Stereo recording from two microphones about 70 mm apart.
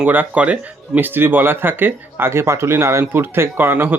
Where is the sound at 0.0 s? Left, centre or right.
Right.